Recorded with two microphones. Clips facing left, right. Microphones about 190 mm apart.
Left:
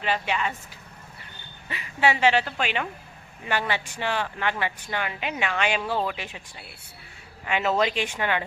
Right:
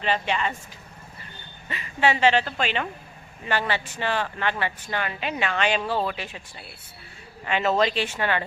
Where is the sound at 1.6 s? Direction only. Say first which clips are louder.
Right 1 dB; 10° left (ahead or behind).